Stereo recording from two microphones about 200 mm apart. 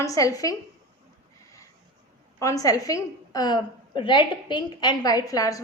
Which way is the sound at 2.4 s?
15° left (ahead or behind).